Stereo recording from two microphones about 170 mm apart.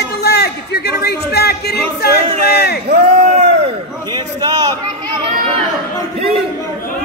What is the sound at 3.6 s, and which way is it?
A man's voice, 25° right (ahead or behind).